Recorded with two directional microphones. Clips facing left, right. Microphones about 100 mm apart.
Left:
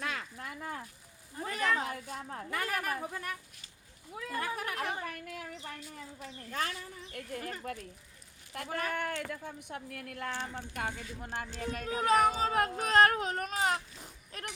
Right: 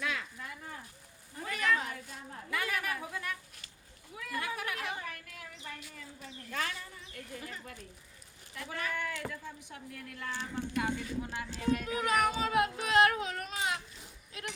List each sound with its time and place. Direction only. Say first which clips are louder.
0.0 s a sound: right 1 dB; 40° left (ahead or behind)
1.4 s cat: even; 35° left (ahead or behind)
1.9 s speech: left 5 dB; 55° left (ahead or behind)
2.6 s a woman's voice: left 1 dB; 40° left (ahead or behind)
4.3 s a sound: left 1 dB; 40° left (ahead or behind)
6.5 s a woman's voice: left 1 dB; 35° left (ahead or behind)
7.1 s speech: left 5 dB; 55° left (ahead or behind)